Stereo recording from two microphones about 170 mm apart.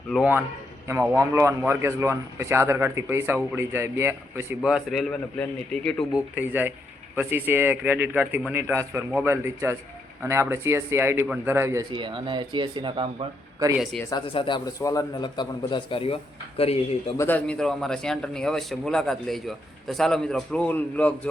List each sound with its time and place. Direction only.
0.9 s a man's voice: 15° right (ahead or behind)
6.1 s a man's voice: 10° right (ahead or behind)
14.3 s a man's voice: 30° left (ahead or behind)
17.2 s a man's voice: 10° left (ahead or behind)